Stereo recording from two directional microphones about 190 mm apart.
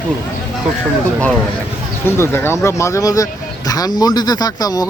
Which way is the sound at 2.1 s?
10° left (ahead or behind).